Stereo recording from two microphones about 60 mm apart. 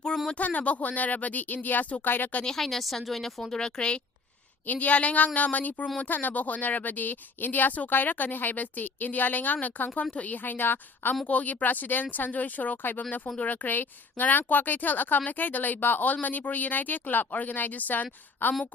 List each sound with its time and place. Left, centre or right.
0.3 s speech: left
2.4 s a woman's voice: centre
3.6 s a woman's voice: centre
4.6 s speech: left